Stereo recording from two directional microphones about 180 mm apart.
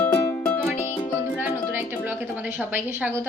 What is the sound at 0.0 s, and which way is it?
Music, 10° left (ahead or behind).